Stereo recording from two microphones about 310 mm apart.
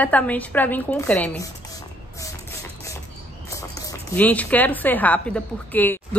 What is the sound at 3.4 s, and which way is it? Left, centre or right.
A woman's voice, centre.